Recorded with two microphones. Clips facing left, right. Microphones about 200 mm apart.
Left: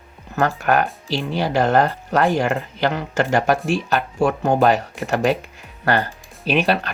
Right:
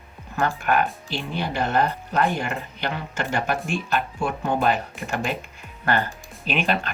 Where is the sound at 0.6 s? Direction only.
40° left (ahead or behind).